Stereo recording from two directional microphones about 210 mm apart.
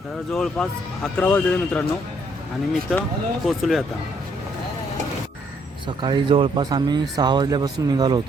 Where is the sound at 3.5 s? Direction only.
Centre (ahead or behind).